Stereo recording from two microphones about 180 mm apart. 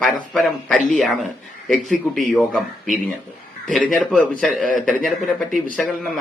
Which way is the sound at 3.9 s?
5° left (ahead or behind).